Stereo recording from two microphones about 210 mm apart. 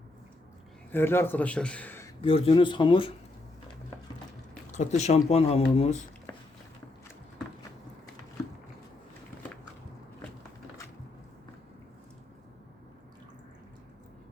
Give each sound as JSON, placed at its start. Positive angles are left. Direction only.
{"t": 0.9, "sound": "speech", "side_deg": 10}
{"t": 2.2, "sound": "speech", "side_deg": 25}
{"t": 4.7, "sound": "speech", "side_deg": 35}